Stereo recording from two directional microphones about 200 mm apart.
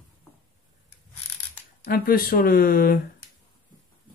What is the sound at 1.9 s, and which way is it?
Speech, 50° left (ahead or behind).